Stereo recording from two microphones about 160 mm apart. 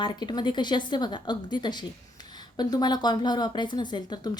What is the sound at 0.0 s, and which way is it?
Speech, 25° left (ahead or behind).